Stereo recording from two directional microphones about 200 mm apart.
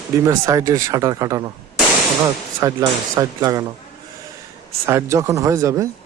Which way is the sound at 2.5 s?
15° right (ahead or behind).